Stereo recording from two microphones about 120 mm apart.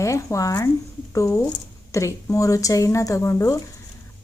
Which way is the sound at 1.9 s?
25° left (ahead or behind).